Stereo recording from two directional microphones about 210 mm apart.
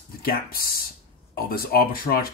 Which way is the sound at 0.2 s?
45° left (ahead or behind).